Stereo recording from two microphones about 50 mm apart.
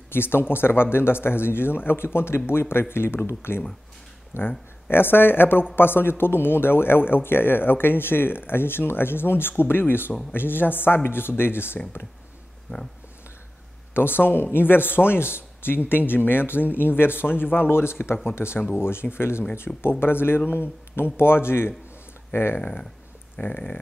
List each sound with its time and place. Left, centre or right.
0.1 s speech: left
13.9 s speech: left
22.6 s speech: left
23.4 s a sound: left